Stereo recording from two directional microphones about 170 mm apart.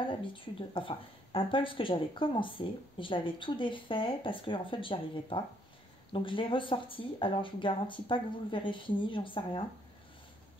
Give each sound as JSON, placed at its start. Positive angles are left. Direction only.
{"t": 0.0, "sound": "speech", "side_deg": 30}